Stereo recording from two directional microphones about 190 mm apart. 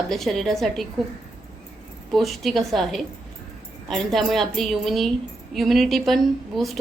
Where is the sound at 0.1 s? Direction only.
Centre (ahead or behind).